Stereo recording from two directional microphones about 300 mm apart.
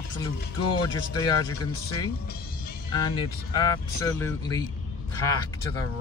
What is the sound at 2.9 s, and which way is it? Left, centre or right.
Speech, centre.